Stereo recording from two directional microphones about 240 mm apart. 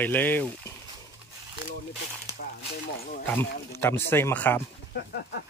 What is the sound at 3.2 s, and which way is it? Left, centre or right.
Speech, centre.